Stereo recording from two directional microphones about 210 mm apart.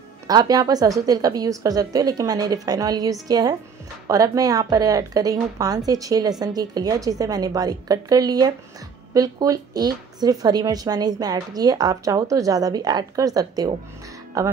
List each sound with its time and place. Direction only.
0.3 s speech: 20° right (ahead or behind)